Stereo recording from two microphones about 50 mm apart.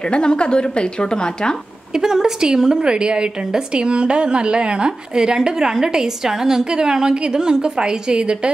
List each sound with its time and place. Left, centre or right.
0.0 s a woman's voice: centre
2.0 s a woman's voice: centre